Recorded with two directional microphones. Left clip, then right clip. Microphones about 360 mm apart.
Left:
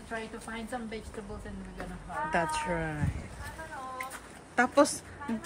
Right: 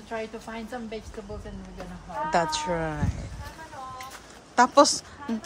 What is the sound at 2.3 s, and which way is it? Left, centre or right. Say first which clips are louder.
Speech: right 5 dB; centre.